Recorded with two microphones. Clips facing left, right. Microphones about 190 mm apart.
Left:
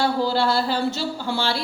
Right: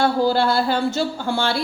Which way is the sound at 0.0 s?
50° right (ahead or behind).